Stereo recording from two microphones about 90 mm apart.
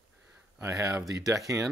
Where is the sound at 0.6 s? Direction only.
40° right (ahead or behind).